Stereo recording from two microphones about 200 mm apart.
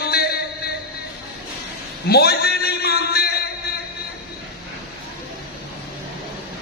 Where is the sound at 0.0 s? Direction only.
50° left (ahead or behind).